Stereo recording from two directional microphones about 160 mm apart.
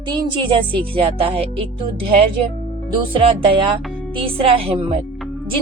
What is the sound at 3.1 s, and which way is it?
Speech, 35° right (ahead or behind).